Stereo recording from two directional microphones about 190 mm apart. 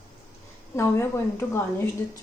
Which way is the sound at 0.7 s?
15° left (ahead or behind).